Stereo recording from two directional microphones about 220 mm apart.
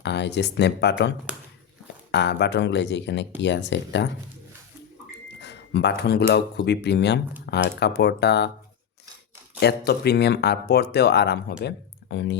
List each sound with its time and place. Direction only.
0.0 s speech: 50° left (ahead or behind)
2.1 s speech: 50° left (ahead or behind)
5.4 s speech: 50° left (ahead or behind)
9.6 s speech: 50° left (ahead or behind)